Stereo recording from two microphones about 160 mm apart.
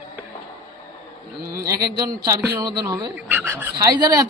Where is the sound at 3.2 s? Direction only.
15° right (ahead or behind).